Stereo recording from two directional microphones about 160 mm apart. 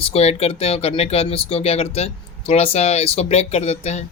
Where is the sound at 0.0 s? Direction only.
40° left (ahead or behind).